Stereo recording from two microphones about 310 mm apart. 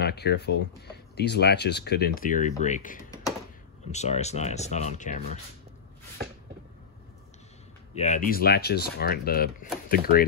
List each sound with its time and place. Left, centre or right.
0.0 s speech: left
7.9 s speech: left